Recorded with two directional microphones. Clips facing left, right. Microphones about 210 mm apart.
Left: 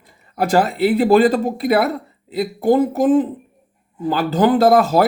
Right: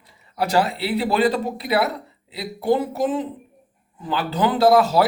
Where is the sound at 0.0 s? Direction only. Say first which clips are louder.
Left 4 dB; 50° left (ahead or behind).